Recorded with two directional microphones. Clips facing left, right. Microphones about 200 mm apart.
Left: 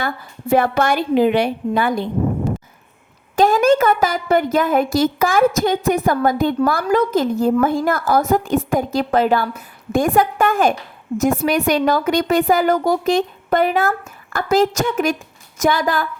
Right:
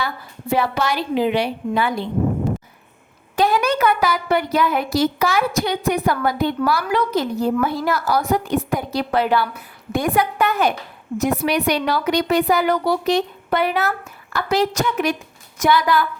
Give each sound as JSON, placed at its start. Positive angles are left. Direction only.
{"t": 0.5, "sound": "a woman's voice", "side_deg": 50}
{"t": 3.3, "sound": "a woman's voice", "side_deg": 45}